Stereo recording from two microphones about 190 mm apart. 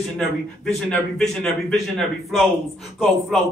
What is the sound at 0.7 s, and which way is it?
Speech, centre (ahead or behind).